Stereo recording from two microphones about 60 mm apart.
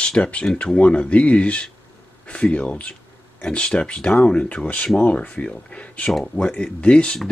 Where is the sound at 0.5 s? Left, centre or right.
Centre.